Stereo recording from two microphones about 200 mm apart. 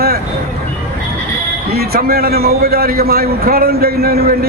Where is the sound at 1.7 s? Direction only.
50° right (ahead or behind).